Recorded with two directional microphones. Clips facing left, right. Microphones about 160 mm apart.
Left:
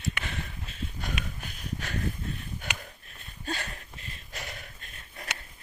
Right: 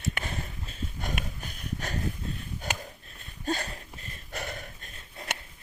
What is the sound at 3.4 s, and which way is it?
Hiccup, 40° right (ahead or behind).